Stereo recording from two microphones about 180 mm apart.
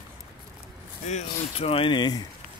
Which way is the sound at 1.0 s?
35° left (ahead or behind).